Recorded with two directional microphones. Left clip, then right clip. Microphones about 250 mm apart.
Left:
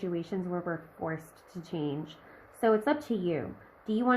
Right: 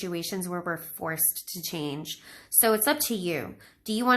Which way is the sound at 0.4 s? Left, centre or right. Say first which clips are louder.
Right 3 dB; centre.